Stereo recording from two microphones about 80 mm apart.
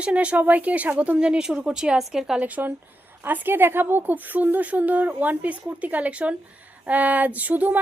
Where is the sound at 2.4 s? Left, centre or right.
Right.